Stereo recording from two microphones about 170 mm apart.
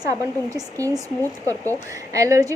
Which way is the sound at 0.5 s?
20° right (ahead or behind).